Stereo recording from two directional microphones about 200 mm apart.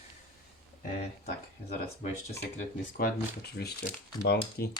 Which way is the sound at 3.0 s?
55° left (ahead or behind).